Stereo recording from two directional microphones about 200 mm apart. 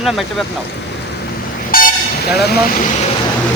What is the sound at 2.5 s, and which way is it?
Speech, 45° left (ahead or behind).